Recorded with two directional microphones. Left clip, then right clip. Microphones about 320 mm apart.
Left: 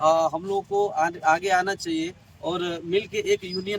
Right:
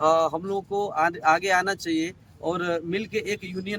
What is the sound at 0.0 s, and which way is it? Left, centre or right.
Speech, centre.